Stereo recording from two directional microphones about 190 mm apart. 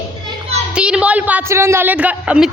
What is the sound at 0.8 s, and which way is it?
Speech, 5° right (ahead or behind).